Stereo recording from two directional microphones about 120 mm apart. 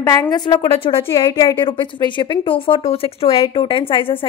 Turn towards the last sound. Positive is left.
turn(degrees=45)  # may be behind; listen again after turning